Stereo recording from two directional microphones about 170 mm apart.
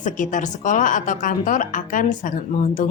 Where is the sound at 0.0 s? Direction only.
50° left (ahead or behind).